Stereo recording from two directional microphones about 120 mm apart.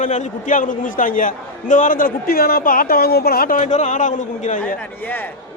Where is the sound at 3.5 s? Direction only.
80° left.